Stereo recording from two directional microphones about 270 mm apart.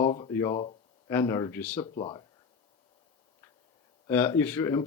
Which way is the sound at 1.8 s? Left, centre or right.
Centre.